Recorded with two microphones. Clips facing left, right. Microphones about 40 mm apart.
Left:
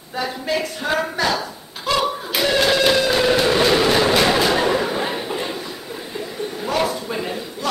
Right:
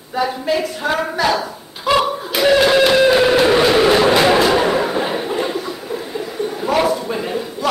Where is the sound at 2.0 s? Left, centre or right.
Centre.